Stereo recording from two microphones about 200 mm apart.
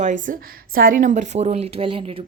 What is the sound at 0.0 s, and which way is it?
A woman's voice, 40° right (ahead or behind).